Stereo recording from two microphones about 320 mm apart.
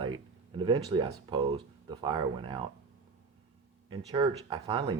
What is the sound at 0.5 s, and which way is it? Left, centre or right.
Speech, centre.